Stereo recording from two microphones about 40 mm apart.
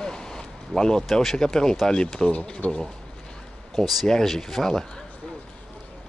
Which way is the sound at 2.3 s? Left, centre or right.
Left.